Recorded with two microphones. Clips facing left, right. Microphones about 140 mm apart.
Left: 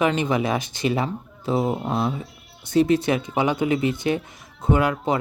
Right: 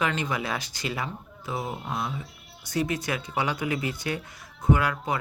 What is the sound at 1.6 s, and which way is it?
Speech, centre (ahead or behind).